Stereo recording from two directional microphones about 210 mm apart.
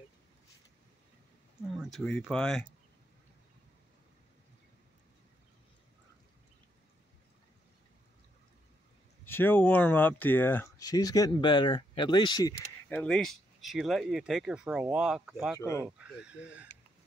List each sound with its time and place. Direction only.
1.7 s speech: centre (ahead or behind)
9.2 s speech: 10° left (ahead or behind)
13.0 s speech: centre (ahead or behind)